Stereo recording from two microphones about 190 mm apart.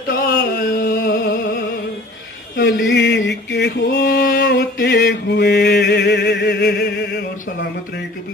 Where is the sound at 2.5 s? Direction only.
65° left (ahead or behind).